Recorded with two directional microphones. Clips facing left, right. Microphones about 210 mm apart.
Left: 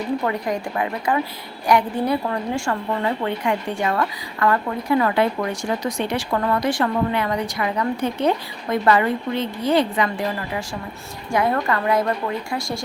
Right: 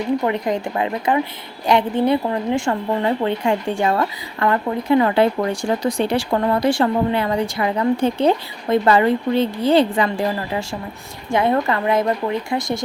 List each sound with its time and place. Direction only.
0.3 s a woman's voice: 20° right (ahead or behind)